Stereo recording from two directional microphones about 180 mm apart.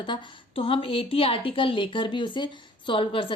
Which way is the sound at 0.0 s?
30° left (ahead or behind).